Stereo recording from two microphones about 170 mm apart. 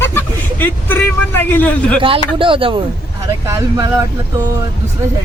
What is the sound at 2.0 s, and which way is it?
Speech, 30° right (ahead or behind).